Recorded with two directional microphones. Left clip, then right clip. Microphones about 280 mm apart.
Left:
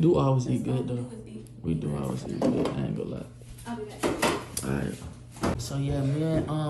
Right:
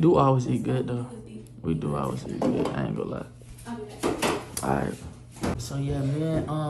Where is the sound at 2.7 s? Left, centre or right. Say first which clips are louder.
Right 3 dB; right.